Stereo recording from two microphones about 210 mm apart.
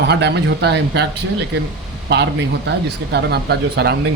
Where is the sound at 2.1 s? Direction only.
55° right (ahead or behind).